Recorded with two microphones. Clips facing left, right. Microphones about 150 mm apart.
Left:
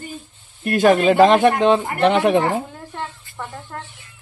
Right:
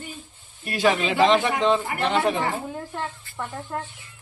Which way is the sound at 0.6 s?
50° left (ahead or behind).